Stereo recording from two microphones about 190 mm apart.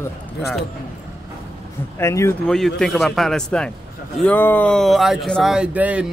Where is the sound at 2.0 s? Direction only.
15° left (ahead or behind).